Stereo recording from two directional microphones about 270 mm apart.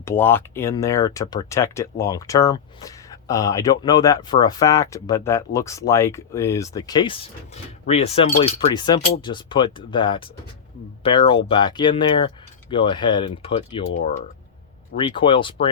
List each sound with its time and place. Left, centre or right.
0.0 s speech: centre
14.9 s speech: centre